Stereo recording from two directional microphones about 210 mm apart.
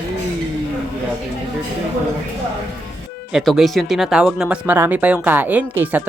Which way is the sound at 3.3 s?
Centre (ahead or behind).